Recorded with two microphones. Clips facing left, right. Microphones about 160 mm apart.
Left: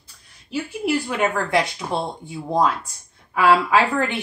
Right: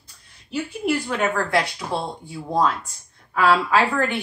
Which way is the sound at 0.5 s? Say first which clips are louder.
Left 1 dB; 10° left (ahead or behind).